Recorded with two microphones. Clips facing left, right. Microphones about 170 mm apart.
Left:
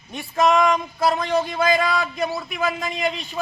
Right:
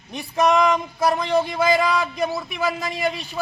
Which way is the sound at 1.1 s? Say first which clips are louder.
Right 1 dB; 10° right (ahead or behind).